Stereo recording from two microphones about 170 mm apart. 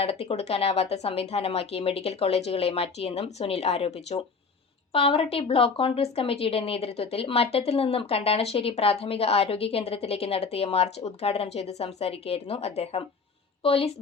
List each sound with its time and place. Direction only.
0.0 s speech: 35° left (ahead or behind)